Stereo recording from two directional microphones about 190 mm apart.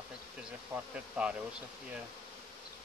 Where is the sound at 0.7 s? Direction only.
10° right (ahead or behind).